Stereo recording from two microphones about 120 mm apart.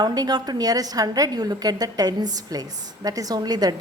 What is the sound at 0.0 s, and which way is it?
A woman's voice, 35° right (ahead or behind).